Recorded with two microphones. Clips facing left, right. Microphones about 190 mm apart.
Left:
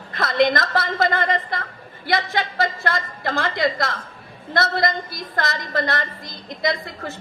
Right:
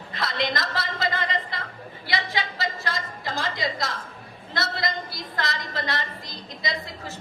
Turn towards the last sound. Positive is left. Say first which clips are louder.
# left 7 dB
turn(degrees=55)  # may be behind; listen again after turning